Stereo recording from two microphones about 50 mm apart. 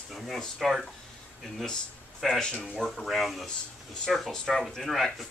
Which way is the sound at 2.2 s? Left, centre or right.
Centre.